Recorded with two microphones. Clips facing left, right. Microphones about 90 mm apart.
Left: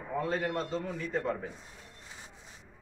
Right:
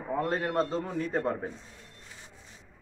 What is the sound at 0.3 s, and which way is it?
A man's voice, 40° right (ahead or behind).